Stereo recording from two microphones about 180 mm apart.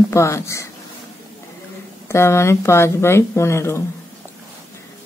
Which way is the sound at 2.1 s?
15° left (ahead or behind).